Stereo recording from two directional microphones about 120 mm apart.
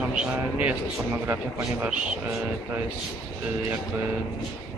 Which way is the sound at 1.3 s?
10° right (ahead or behind).